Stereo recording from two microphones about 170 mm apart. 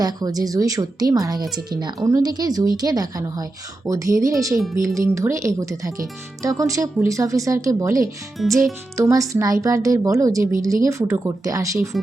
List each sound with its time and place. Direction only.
0.0 s speech: 20° right (ahead or behind)
8.4 s speech: centre (ahead or behind)
9.0 s speech: 20° right (ahead or behind)